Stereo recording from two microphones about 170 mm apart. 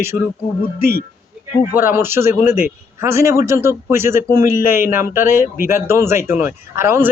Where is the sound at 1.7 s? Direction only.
10° right (ahead or behind).